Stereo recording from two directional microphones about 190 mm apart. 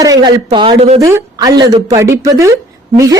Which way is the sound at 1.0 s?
15° right (ahead or behind).